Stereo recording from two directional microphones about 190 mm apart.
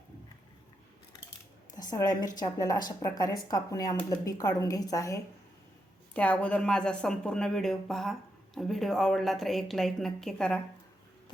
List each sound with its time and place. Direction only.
1.7 s a woman's voice: 20° left (ahead or behind)
6.1 s a woman's voice: 5° left (ahead or behind)